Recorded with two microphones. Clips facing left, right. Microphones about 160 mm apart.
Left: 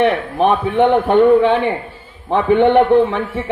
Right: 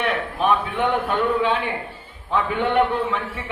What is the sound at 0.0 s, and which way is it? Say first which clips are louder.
A man's voice: left 8 dB; 60° left (ahead or behind).